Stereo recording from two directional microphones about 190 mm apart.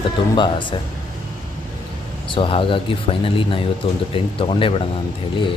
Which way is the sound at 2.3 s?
30° left (ahead or behind).